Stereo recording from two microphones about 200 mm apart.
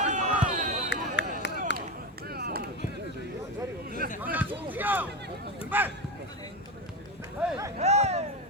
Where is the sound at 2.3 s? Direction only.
50° right (ahead or behind).